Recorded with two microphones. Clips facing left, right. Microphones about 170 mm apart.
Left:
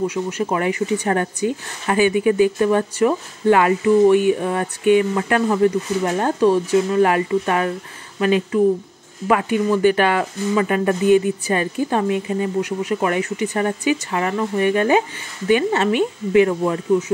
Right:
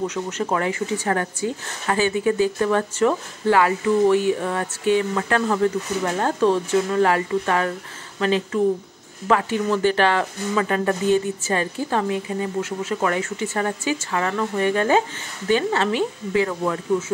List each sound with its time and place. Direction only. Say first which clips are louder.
0.0 s speech: left 3 dB; 10° left (ahead or behind)